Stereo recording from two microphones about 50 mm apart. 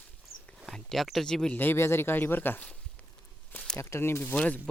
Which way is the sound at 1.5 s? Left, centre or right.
Left.